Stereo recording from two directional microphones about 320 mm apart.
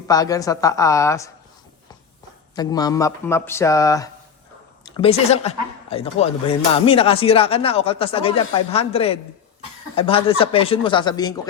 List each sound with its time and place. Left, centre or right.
0.1 s speech: centre
2.6 s speech: centre